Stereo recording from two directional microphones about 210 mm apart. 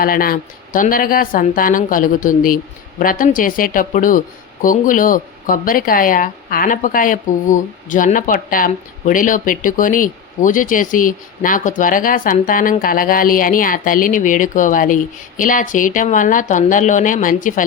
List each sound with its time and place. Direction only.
0.0 s speech: 45° left (ahead or behind)